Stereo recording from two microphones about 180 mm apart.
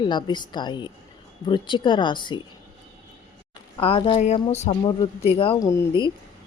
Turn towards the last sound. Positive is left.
turn(degrees=20)  # may be behind; listen again after turning